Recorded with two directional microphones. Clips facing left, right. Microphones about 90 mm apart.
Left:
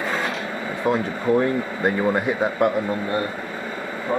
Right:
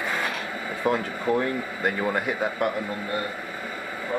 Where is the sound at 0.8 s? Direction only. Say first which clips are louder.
Left 3 dB; 25° left (ahead or behind).